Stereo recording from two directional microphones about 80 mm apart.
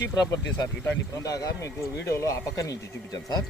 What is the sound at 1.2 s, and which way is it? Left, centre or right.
Speech, left.